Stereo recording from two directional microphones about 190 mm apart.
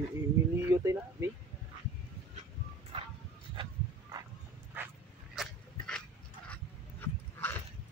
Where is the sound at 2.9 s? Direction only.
30° right (ahead or behind).